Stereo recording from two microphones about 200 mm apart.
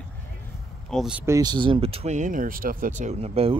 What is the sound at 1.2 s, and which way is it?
Speech, 15° right (ahead or behind).